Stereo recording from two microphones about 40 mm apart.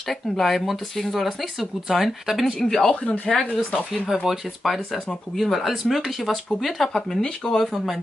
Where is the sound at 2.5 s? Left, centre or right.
Centre.